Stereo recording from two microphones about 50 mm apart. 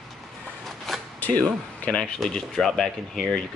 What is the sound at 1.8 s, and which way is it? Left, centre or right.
Speech, centre.